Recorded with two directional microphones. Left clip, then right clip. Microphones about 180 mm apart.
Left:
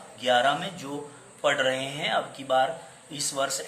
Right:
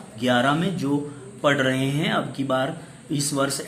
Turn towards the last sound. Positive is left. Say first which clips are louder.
# right 4 dB
turn(degrees=-10)  # may be behind; listen again after turning